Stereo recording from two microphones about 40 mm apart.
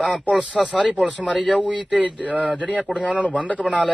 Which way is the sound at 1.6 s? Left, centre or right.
Right.